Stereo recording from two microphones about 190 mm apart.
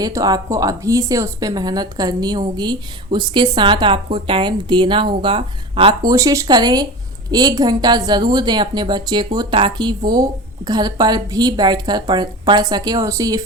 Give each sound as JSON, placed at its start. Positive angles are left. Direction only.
{"t": 0.0, "sound": "a woman's voice", "side_deg": -20}